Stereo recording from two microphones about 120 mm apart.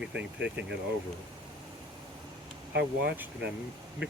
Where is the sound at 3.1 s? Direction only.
15° right (ahead or behind).